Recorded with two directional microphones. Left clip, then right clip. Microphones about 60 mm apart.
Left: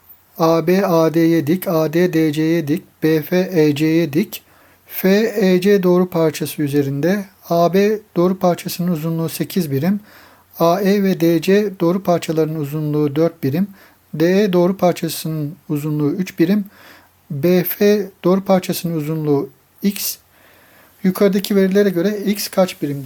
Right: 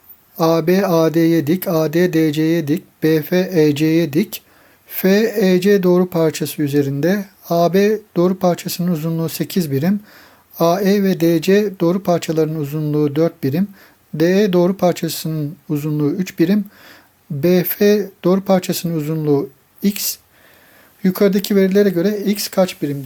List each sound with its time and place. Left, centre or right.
0.3 s speech: centre